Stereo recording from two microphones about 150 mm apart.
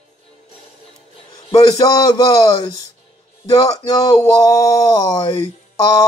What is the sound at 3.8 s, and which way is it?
Speech, 25° left (ahead or behind).